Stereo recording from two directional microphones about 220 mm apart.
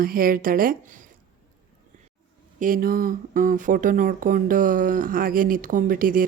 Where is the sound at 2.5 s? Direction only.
40° right (ahead or behind).